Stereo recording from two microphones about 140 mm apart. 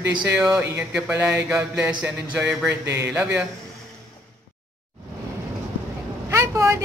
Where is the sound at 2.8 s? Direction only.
20° right (ahead or behind).